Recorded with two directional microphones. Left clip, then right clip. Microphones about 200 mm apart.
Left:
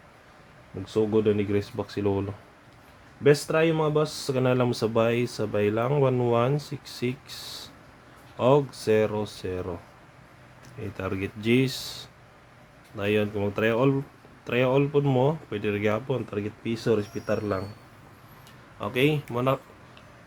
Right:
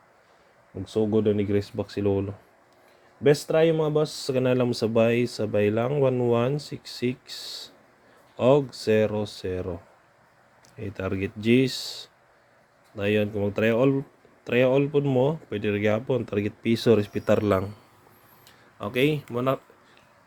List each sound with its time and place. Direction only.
0.9 s speech: 15° right (ahead or behind)
3.2 s speech: 15° right (ahead or behind); by 17.7 s 35° right (ahead or behind)
18.8 s speech: 20° right (ahead or behind)